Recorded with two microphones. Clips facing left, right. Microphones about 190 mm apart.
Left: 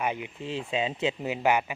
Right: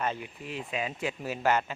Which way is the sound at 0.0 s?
15° left (ahead or behind).